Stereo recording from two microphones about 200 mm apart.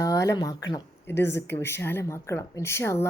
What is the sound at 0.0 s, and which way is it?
A woman's voice, 15° left (ahead or behind).